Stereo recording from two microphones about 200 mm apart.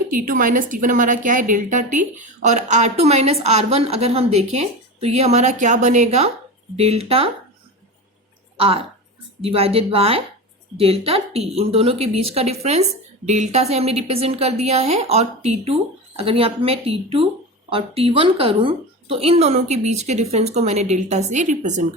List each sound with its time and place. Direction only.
0.1 s a woman's voice: 45° right (ahead or behind)
8.5 s a woman's voice: 30° right (ahead or behind)